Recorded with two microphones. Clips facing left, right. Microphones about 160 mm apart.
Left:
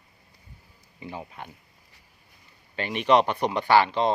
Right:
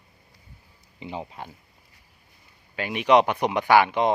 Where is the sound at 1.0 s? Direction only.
25° right (ahead or behind).